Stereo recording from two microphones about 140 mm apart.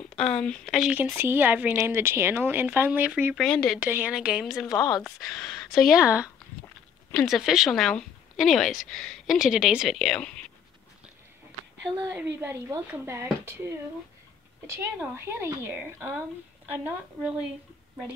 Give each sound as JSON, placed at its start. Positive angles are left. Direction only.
{"t": 0.2, "sound": "a woman's voice", "side_deg": 5}
{"t": 1.1, "sound": "a woman's voice", "side_deg": -15}
{"t": 3.3, "sound": "a woman's voice", "side_deg": 5}
{"t": 3.8, "sound": "a woman's voice", "side_deg": -10}
{"t": 4.7, "sound": "speech", "side_deg": 25}
{"t": 5.2, "sound": "a woman's voice", "side_deg": 5}
{"t": 12.1, "sound": "a woman's voice", "side_deg": -15}
{"t": 14.7, "sound": "a woman's voice", "side_deg": -15}